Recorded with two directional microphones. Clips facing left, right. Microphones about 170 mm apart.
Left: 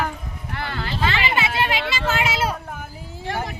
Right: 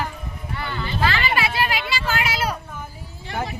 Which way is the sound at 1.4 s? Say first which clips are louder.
Left 1 dB; 25° left (ahead or behind).